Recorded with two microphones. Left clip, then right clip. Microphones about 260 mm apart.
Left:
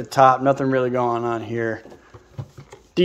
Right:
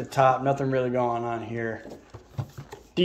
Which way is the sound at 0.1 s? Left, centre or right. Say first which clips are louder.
Left 7 dB; centre.